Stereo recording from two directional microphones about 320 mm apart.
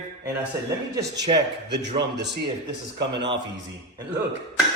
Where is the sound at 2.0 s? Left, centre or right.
Right.